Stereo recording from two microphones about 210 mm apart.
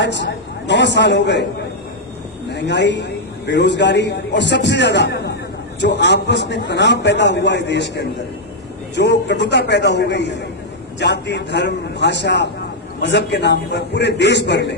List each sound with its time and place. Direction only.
0.0 s a man's voice: 55° left (ahead or behind)
2.5 s a man's voice: 55° left (ahead or behind)